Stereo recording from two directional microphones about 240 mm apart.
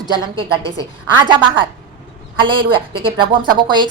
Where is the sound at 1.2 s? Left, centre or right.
Centre.